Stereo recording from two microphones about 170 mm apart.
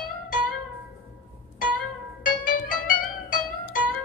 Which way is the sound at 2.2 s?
55° left (ahead or behind).